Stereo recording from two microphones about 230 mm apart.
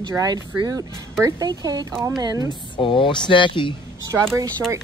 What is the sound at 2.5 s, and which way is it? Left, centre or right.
Speech, left.